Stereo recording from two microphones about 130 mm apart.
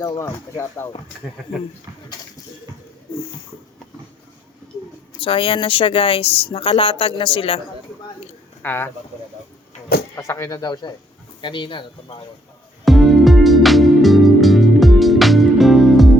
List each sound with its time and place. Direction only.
0.2 s speech: 20° left (ahead or behind)
5.1 s a woman's voice: 45° left (ahead or behind)
8.6 s speech: 15° left (ahead or behind)
10.2 s speech: 25° left (ahead or behind); by 12.1 s 40° left (ahead or behind)
12.8 s music: centre (ahead or behind)